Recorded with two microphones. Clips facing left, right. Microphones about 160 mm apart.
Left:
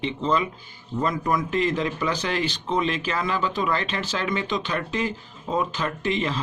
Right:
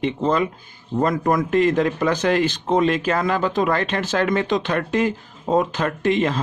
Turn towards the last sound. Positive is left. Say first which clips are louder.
# right 6 dB
turn(degrees=-50)  # may be behind; listen again after turning